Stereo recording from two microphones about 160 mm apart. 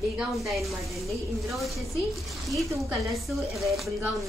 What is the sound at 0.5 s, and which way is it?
A woman's voice, centre (ahead or behind).